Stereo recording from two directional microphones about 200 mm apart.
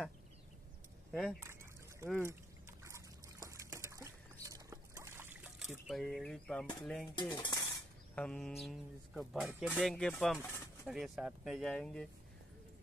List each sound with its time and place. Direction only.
1.1 s speech: centre (ahead or behind)
1.4 s a sound: 10° right (ahead or behind)
2.8 s trickle: 15° right (ahead or behind); by 7.1 s 5° left (ahead or behind)
7.2 s dishes: 25° left (ahead or behind)
8.1 s speech: 5° left (ahead or behind)